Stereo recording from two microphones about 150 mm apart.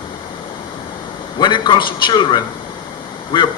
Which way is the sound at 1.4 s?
30° left (ahead or behind).